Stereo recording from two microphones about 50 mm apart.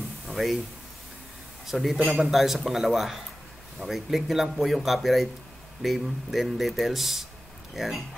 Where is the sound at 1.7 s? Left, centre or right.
Centre.